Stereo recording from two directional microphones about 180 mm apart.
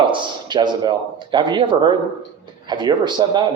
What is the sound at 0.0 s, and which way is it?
A man's voice, 25° right (ahead or behind).